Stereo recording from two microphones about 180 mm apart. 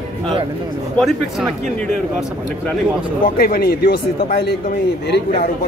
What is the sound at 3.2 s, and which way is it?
Speech, 55° left (ahead or behind).